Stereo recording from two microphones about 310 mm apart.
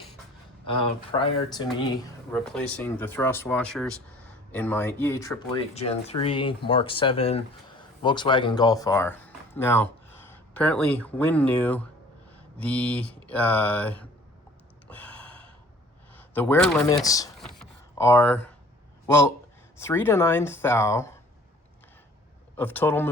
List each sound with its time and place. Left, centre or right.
0.7 s speech: centre
2.3 s speech: centre
5.7 s speech: centre
14.8 s gasp: centre
16.1 s speech: centre
17.5 s a sound: centre
19.0 s speech: centre
22.5 s speech: centre